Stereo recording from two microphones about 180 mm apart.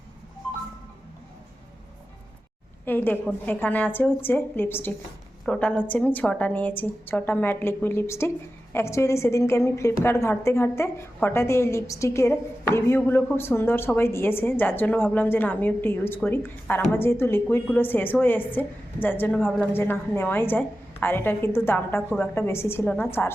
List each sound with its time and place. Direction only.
2.8 s a woman's voice: 10° left (ahead or behind)